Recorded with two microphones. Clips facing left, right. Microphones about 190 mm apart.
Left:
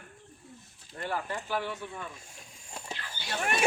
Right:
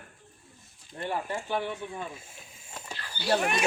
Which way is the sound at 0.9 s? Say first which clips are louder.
Right 2 dB; 20° right (ahead or behind).